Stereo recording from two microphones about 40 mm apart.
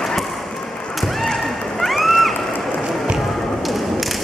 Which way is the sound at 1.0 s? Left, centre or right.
Centre.